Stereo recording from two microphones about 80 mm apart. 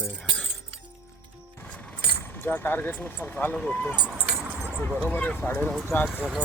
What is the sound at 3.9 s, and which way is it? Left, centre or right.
Speech, centre.